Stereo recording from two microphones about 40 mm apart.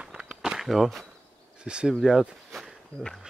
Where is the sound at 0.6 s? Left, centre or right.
Centre.